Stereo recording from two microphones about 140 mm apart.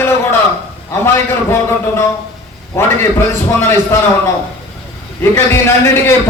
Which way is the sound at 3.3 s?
15° left (ahead or behind).